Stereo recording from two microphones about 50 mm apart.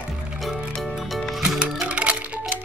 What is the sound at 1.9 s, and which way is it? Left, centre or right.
Music, right.